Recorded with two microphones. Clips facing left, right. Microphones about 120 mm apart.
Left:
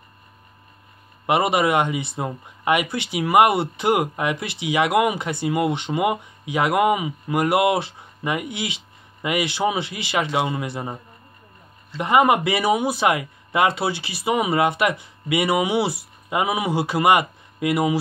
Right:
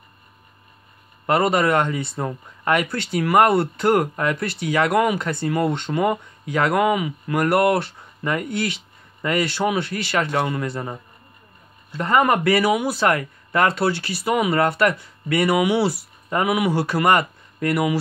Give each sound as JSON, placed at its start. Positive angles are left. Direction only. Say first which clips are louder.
{"t": 1.2, "sound": "speech", "louder": "right 1 dB", "side_deg": 15}
{"t": 12.0, "sound": "speech", "louder": "left 1 dB", "side_deg": 15}